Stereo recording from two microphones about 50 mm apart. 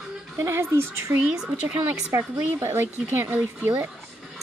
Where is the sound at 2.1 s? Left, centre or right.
Right.